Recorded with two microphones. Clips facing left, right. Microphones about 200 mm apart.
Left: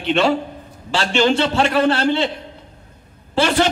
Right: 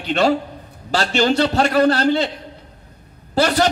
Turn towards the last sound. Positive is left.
turn(degrees=-40)  # may be behind; listen again after turning